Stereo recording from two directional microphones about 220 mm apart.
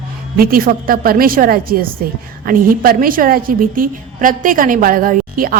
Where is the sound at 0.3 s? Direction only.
40° right (ahead or behind).